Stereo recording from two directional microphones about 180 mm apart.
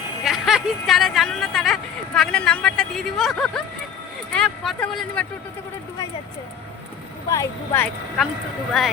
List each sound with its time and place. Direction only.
0.3 s speech: centre (ahead or behind)
7.3 s speech: 15° left (ahead or behind)
8.8 s speech: centre (ahead or behind)